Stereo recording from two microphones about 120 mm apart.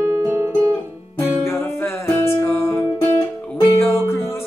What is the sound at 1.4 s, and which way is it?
Music, 20° left (ahead or behind).